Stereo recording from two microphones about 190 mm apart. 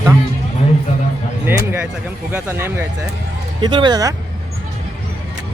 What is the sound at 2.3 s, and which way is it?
Speech, 10° right (ahead or behind).